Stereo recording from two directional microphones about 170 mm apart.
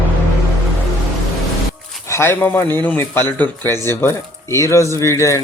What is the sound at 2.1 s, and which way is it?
A man's voice, 15° left (ahead or behind).